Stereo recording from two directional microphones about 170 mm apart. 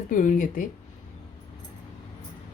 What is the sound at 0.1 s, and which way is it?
Speech, 50° left (ahead or behind).